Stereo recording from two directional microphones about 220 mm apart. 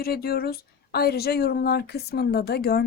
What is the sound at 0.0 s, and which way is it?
Speech, 45° left (ahead or behind).